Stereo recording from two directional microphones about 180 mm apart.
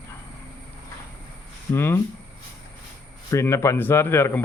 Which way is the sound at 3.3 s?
15° left (ahead or behind).